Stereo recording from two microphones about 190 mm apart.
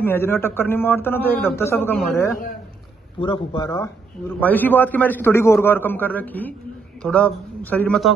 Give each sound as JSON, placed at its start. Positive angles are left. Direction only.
{"t": 0.0, "sound": "a man's voice", "side_deg": 10}
{"t": 3.2, "sound": "a man's voice", "side_deg": 25}